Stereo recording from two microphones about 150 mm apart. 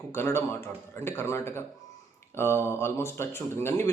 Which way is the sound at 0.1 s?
15° left (ahead or behind).